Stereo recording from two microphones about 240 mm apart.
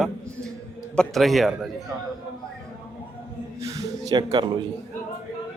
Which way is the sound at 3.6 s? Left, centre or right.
Centre.